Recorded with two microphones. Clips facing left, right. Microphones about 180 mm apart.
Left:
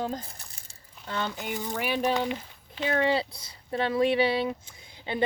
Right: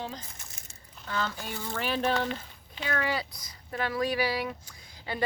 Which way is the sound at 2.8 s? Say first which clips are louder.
Left 6 dB; 25° left (ahead or behind).